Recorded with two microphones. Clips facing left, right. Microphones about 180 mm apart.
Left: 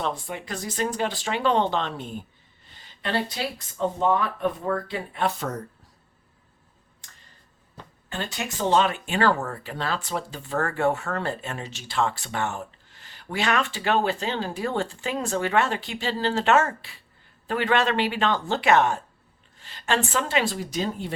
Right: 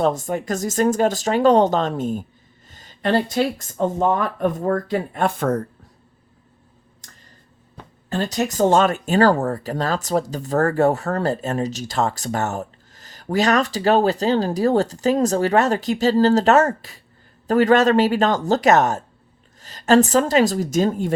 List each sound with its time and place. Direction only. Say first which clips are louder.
0.0 s speech: right 9 dB; 45° right (ahead or behind)
7.0 s a sound: right 5 dB; 40° right (ahead or behind)
8.1 s speech: right 10 dB; 40° right (ahead or behind)